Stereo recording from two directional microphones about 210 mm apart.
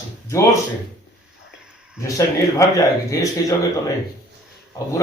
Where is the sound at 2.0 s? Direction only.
15° left (ahead or behind).